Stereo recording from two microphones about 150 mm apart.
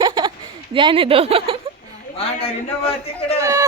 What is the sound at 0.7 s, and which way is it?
Speech, 35° right (ahead or behind).